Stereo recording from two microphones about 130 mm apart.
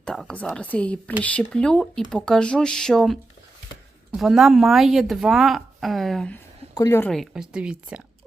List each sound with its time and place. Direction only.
0.0 s a woman's voice: 5° left (ahead or behind)
6.7 s a woman's voice: 25° left (ahead or behind)
7.1 s a woman's voice: centre (ahead or behind)